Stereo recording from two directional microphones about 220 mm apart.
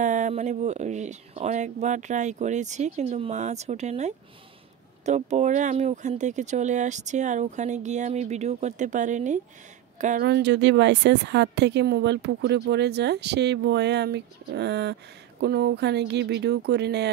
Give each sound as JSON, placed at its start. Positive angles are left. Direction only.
{"t": 0.0, "sound": "speech", "side_deg": -35}
{"t": 10.2, "sound": "speech", "side_deg": -50}